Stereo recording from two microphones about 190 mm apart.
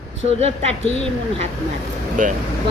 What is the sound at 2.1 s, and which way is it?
Speech, 45° right (ahead or behind).